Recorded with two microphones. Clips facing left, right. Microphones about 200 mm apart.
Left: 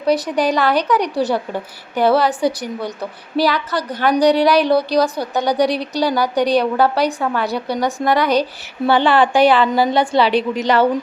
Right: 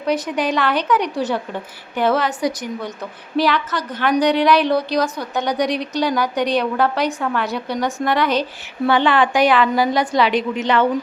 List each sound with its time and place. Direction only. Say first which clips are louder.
0.0 s a woman's voice: left 4 dB; 35° left (ahead or behind)